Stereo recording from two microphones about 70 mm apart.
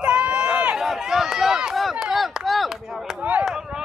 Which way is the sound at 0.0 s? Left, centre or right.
Centre.